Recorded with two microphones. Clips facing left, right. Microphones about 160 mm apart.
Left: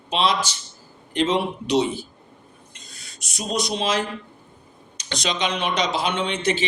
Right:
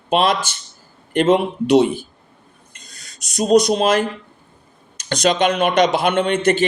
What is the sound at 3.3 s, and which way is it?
Speech, 45° right (ahead or behind).